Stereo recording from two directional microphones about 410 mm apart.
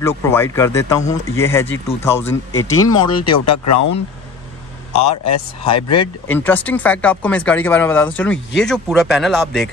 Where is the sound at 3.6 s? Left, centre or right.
Left.